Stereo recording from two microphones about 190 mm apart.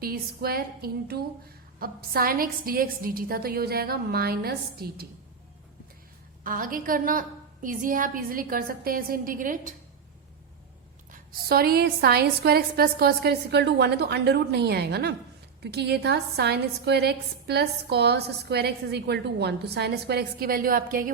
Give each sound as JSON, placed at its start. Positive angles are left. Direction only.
{"t": 0.0, "sound": "a woman's voice", "side_deg": -50}
{"t": 6.4, "sound": "a woman's voice", "side_deg": -45}
{"t": 11.1, "sound": "a woman's voice", "side_deg": -55}